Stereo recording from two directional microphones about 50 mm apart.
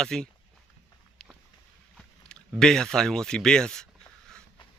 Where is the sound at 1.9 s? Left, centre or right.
Centre.